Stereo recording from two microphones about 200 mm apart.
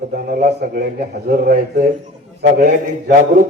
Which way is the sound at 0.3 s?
45° right (ahead or behind).